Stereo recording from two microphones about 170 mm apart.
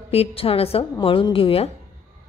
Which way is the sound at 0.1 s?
35° left (ahead or behind).